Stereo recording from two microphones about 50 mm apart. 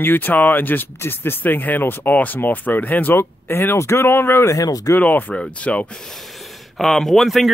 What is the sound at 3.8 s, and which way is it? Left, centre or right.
Speech, left.